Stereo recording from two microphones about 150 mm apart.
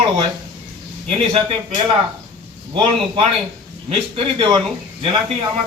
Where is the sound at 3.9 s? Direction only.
40° right (ahead or behind).